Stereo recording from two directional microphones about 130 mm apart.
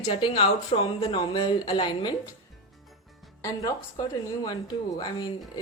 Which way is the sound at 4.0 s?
30° left (ahead or behind).